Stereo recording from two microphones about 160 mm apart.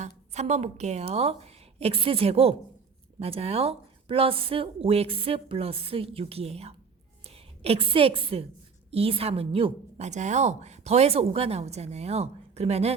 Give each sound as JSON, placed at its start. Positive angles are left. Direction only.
{"t": 0.0, "sound": "a woman's voice", "side_deg": -45}